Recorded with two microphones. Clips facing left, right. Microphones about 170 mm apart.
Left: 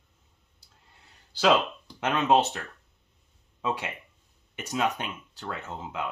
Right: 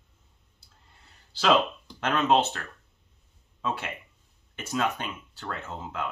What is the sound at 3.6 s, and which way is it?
Speech, 15° left (ahead or behind).